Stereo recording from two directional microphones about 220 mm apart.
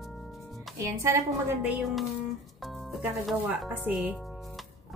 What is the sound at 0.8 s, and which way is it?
Speech, 15° right (ahead or behind).